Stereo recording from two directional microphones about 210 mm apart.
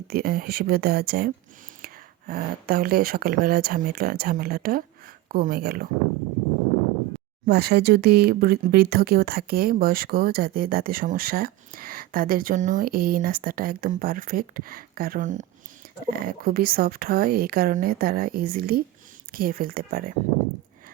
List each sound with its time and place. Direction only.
0.1 s speech: 45° right (ahead or behind)
7.4 s speech: 50° right (ahead or behind)